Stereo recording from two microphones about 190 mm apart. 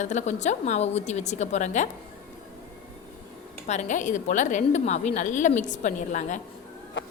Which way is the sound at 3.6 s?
40° left (ahead or behind).